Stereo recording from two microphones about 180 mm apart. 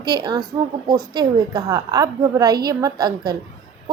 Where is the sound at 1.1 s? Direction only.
20° right (ahead or behind).